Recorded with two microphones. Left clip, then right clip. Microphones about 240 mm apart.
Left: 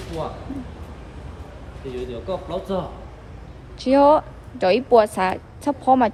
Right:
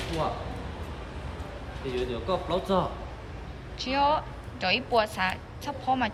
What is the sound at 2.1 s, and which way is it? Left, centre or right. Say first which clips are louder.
Speech: left 2 dB; centre.